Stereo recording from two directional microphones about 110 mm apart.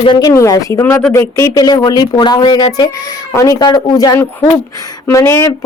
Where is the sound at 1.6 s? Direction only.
40° left (ahead or behind).